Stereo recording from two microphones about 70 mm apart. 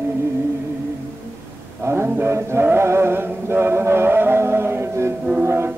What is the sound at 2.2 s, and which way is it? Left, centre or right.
Chant, right.